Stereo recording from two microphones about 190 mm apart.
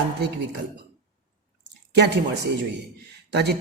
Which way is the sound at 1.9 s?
65° right (ahead or behind).